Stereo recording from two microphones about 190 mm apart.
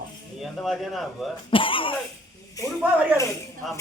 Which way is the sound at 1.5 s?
25° left (ahead or behind).